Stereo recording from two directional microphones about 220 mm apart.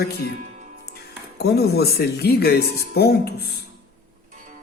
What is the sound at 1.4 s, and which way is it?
Speech, 45° left (ahead or behind).